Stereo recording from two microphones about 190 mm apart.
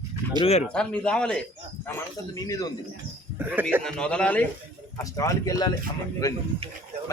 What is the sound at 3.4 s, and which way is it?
Speech, 10° right (ahead or behind).